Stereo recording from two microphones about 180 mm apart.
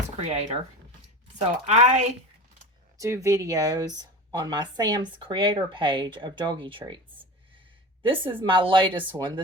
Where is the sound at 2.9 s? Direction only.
15° right (ahead or behind).